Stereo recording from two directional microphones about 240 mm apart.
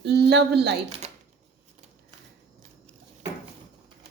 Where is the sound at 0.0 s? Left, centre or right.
Right.